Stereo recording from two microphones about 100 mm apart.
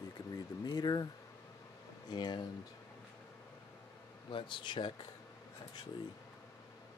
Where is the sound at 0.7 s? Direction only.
45° left (ahead or behind).